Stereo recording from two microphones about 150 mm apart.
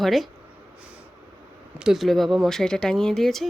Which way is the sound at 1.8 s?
Centre (ahead or behind).